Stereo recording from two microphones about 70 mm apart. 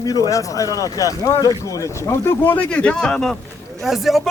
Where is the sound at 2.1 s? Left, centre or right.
Left.